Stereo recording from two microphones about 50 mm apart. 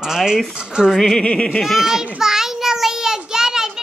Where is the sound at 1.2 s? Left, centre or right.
Centre.